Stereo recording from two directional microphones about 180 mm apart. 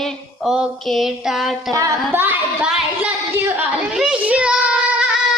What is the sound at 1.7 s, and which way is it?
Speech, 15° right (ahead or behind).